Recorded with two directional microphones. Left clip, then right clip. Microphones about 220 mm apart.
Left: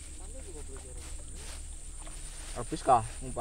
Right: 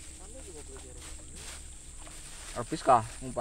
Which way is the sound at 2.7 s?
30° right (ahead or behind).